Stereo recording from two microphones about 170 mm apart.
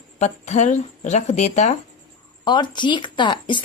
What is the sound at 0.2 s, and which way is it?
Speech, 45° left (ahead or behind).